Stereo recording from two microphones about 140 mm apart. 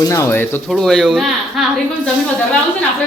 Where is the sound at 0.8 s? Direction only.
Centre (ahead or behind).